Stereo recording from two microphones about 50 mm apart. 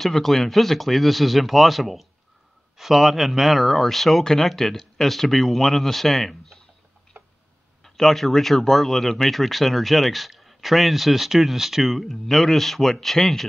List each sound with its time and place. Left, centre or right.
0.0 s speech: centre
7.2 s a sound: right
7.8 s speech: centre